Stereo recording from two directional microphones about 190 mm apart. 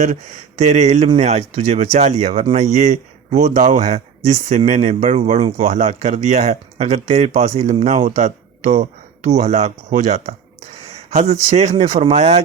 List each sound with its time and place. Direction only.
0.0 s speech: 40° right (ahead or behind)